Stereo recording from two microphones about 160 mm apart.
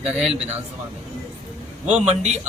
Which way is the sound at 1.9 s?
40° right (ahead or behind).